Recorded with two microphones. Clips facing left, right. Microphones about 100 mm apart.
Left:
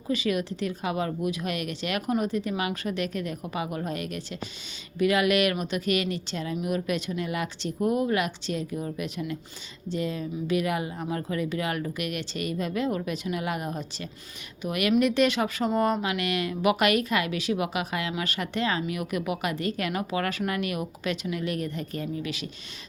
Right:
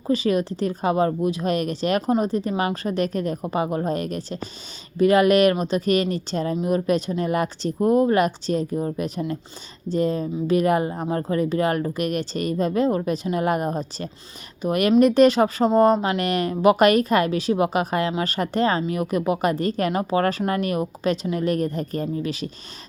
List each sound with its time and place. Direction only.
0.1 s speech: 35° right (ahead or behind)